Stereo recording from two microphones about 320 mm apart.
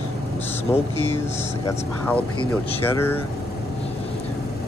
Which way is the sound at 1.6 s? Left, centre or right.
Centre.